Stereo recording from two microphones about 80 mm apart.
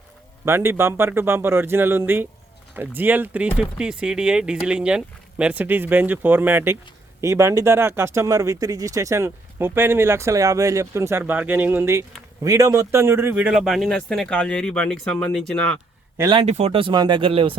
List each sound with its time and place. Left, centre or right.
0.4 s speech: right
7.2 s speech: right
11.3 s speech: right
11.9 s speech: right
13.3 s speech: centre
16.8 s speech: right